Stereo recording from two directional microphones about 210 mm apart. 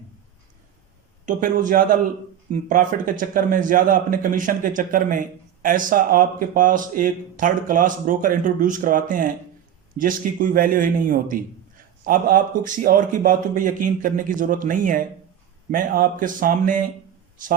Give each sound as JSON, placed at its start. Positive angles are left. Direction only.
{"t": 1.2, "sound": "a man's voice", "side_deg": -40}